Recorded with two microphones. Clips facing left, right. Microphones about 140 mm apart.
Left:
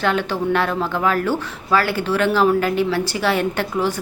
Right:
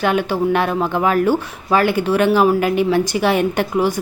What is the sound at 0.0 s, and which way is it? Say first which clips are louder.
A woman's voice: right 3 dB; 15° right (ahead or behind).